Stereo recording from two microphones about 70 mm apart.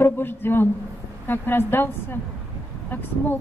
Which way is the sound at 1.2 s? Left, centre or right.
Left.